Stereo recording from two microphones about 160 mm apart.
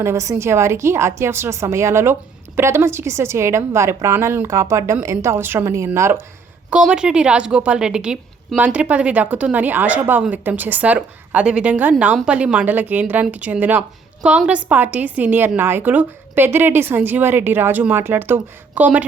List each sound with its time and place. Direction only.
0.0 s a woman's voice: 15° right (ahead or behind)
6.7 s a woman's voice: 5° right (ahead or behind)